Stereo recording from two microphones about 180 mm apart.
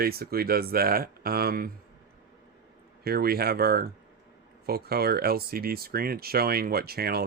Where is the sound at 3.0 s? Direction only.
60° right (ahead or behind).